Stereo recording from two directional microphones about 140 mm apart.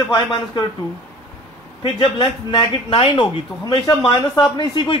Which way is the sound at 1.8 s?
40° left (ahead or behind).